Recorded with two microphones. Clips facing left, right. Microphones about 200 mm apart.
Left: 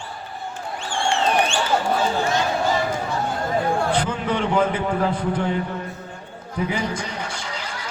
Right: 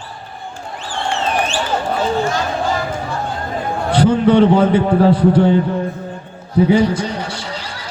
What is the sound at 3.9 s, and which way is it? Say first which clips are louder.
A man's voice: right 11 dB; 35° right (ahead or behind).